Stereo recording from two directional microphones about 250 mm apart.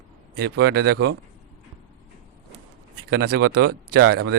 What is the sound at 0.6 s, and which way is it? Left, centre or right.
Speech, right.